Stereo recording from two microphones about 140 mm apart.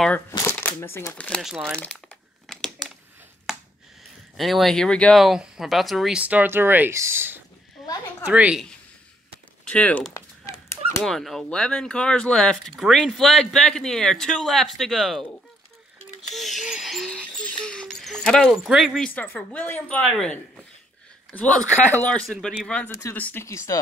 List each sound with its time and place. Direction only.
0.3 s shuffling cards: 20° left (ahead or behind)
0.6 s speech: 15° left (ahead or behind)
1.4 s speech: centre (ahead or behind)
2.4 s crumpling: centre (ahead or behind)
4.4 s speech: centre (ahead or behind); by 7.4 s 15° right (ahead or behind)
7.8 s speech: 25° left (ahead or behind)
8.3 s a woman's voice: 10° right (ahead or behind)
9.7 s speech: 10° left (ahead or behind)
10.1 s fowl: 20° left (ahead or behind)
11.0 s speech: 5° left (ahead or behind)
16.3 s a sound: centre (ahead or behind)
20.1 s speech: 5° left (ahead or behind); by 23.8 s 20° left (ahead or behind)